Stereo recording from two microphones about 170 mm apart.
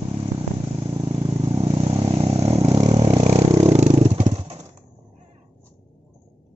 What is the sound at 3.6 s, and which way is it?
Vehicle, 40° right (ahead or behind).